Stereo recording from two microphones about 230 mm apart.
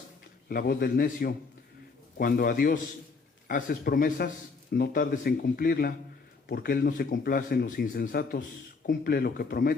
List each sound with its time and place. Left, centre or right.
0.4 s speech: left